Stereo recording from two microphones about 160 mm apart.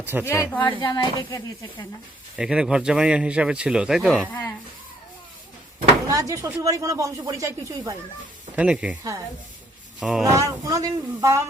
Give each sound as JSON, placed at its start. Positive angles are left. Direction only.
{"t": 0.0, "sound": "speech", "side_deg": -15}
{"t": 0.6, "sound": "speech", "side_deg": 30}
{"t": 2.3, "sound": "speech", "side_deg": -5}
{"t": 4.3, "sound": "speech", "side_deg": 15}
{"t": 6.1, "sound": "speech", "side_deg": -20}
{"t": 8.5, "sound": "speech", "side_deg": -5}
{"t": 10.0, "sound": "speech", "side_deg": -5}
{"t": 10.2, "sound": "speech", "side_deg": -20}